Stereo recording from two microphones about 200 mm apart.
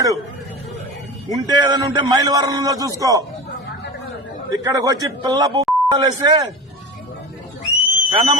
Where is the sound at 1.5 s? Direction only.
20° right (ahead or behind).